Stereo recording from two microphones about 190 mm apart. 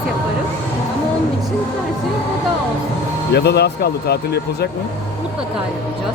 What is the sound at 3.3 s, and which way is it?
Speech, 60° left (ahead or behind).